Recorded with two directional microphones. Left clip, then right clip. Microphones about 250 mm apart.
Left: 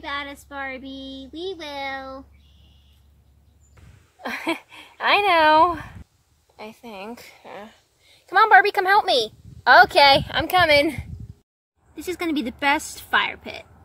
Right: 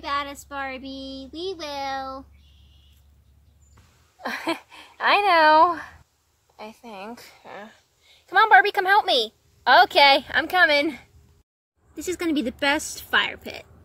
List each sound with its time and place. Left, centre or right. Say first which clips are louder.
0.0 s speech: right 3 dB; right
4.2 s a woman's voice: left 1 dB; centre
11.9 s a woman's voice: even; centre